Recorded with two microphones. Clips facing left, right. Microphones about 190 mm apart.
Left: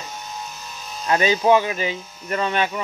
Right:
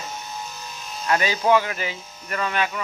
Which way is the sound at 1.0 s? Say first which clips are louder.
Left 3 dB; 20° left (ahead or behind).